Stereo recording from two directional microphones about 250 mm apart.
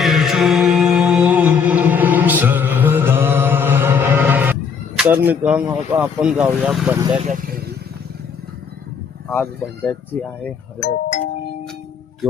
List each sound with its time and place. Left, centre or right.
0.0 s music: centre
4.9 s speech: centre
9.3 s speech: centre
10.8 s speech: left
12.2 s speech: centre